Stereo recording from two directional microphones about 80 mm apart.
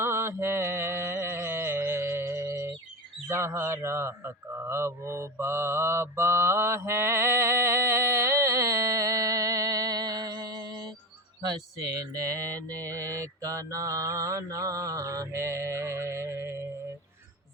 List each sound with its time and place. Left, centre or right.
0.0 s music: right
3.2 s speech: right
11.9 s mantra: right